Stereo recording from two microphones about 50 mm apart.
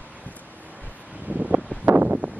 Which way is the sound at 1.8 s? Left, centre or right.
Right.